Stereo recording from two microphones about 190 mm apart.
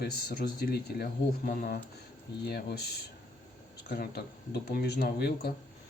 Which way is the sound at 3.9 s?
55° left (ahead or behind).